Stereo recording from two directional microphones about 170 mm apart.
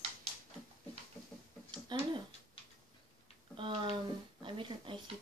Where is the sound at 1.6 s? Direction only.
25° right (ahead or behind).